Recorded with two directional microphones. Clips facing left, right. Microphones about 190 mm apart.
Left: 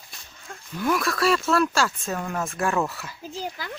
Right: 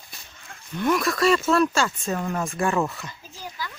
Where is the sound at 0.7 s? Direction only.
Centre (ahead or behind).